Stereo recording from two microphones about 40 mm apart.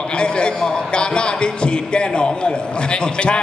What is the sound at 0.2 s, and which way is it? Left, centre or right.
A man's voice, left.